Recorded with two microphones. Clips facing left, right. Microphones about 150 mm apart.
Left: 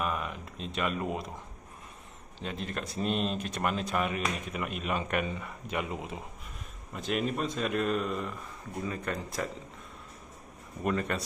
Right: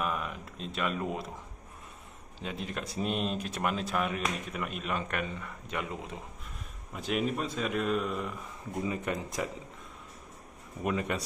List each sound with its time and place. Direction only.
0.0 s a sound: centre (ahead or behind)
2.4 s speech: 5° right (ahead or behind); by 6.1 s 10° left (ahead or behind)
6.9 s speech: 5° right (ahead or behind)
8.8 s speech: 15° right (ahead or behind)
10.8 s speech: 10° right (ahead or behind)